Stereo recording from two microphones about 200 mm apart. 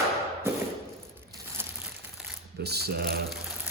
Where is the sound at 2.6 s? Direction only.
55° right (ahead or behind).